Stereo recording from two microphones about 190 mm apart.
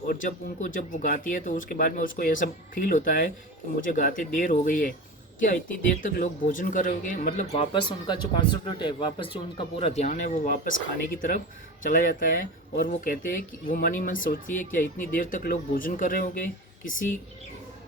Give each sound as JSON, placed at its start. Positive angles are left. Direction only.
{"t": 0.1, "sound": "speech", "side_deg": 45}